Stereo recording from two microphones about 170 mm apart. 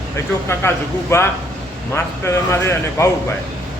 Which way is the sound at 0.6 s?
15° left (ahead or behind).